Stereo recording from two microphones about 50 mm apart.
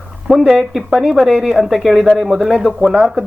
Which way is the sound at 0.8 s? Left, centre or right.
Centre.